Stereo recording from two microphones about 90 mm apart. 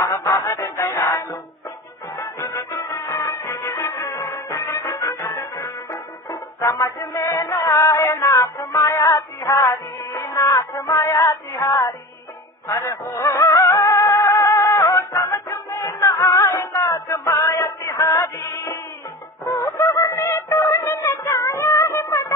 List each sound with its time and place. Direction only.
0.0 s music: 35° left (ahead or behind)